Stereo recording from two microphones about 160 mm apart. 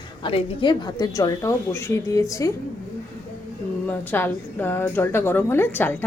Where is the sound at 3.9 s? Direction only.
15° left (ahead or behind).